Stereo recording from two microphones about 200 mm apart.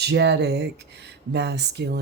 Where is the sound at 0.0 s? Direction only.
60° right (ahead or behind).